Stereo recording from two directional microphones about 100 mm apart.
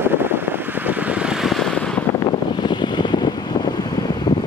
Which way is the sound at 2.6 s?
50° left (ahead or behind).